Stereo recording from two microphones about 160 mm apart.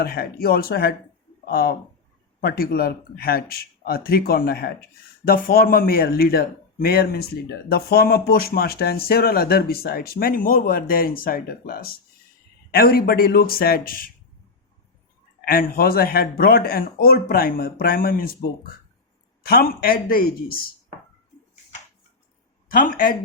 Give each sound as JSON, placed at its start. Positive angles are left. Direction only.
{"t": 0.0, "sound": "speech", "side_deg": 75}
{"t": 15.4, "sound": "speech", "side_deg": 65}
{"t": 19.5, "sound": "speech", "side_deg": 70}
{"t": 22.7, "sound": "speech", "side_deg": 60}